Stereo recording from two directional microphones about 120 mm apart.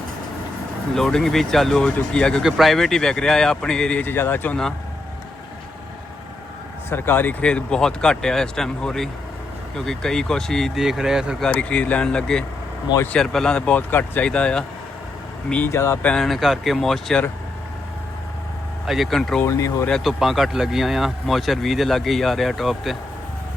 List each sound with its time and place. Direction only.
0.9 s speech: 5° left (ahead or behind)
6.9 s speech: 20° left (ahead or behind); by 11.4 s 5° right (ahead or behind)
11.4 s speech: 10° left (ahead or behind)
16.0 s speech: centre (ahead or behind)
18.9 s speech: centre (ahead or behind)
19.5 s speech: 25° left (ahead or behind)
19.9 s speech: centre (ahead or behind)